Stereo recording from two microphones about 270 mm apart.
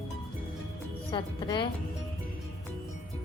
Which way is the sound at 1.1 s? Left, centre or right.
Centre.